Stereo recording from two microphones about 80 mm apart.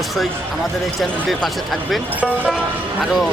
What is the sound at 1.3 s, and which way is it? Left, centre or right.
Speech, centre.